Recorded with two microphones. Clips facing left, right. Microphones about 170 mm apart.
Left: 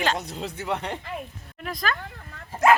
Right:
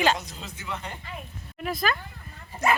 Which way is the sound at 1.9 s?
75° left (ahead or behind).